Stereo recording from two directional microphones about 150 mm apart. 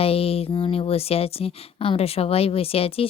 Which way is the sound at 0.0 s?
40° left (ahead or behind).